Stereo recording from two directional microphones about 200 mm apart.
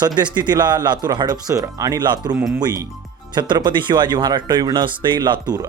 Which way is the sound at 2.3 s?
5° right (ahead or behind).